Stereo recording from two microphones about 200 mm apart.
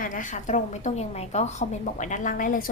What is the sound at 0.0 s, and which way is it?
A woman's voice, 40° left (ahead or behind).